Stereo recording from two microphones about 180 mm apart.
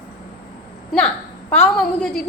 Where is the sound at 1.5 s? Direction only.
5° left (ahead or behind).